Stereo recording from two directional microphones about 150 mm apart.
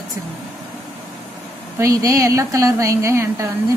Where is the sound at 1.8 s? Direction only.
20° right (ahead or behind).